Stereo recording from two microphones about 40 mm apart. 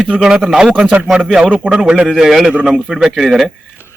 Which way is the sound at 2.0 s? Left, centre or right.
Centre.